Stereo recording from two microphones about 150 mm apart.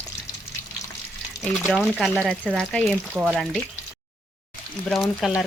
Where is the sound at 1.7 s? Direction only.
Centre (ahead or behind).